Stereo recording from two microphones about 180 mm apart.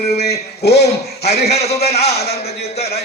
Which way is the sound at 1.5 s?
35° left (ahead or behind).